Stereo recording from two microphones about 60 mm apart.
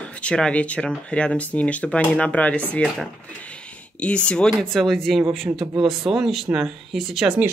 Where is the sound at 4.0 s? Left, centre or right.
Centre.